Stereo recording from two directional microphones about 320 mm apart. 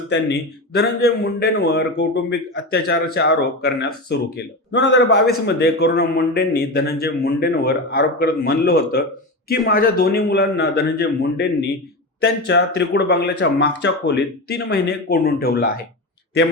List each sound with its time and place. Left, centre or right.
0.1 s a man's voice: left